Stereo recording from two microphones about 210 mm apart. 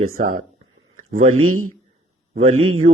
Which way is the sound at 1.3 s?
90° right.